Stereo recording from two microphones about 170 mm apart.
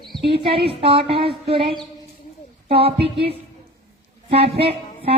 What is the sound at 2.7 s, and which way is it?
Speech, 35° right (ahead or behind).